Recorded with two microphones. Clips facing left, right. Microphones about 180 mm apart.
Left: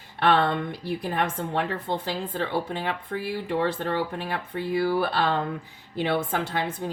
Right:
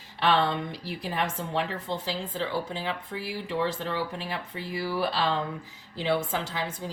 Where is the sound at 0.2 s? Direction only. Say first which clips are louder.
Left 3 dB; 55° left (ahead or behind).